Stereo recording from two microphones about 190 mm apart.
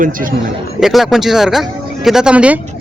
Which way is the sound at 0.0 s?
45° right (ahead or behind).